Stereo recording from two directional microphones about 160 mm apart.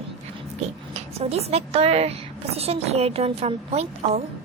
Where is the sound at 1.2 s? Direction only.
40° right (ahead or behind).